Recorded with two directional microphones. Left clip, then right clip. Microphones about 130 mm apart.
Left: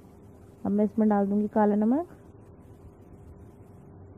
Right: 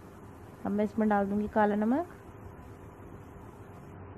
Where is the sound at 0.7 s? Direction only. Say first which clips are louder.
Left 3 dB; 35° left (ahead or behind).